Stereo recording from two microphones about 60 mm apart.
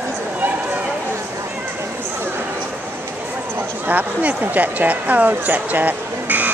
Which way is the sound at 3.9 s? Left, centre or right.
Right.